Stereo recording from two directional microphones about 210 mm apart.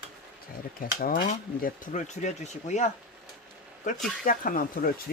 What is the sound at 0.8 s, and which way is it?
Speech, 45° left (ahead or behind).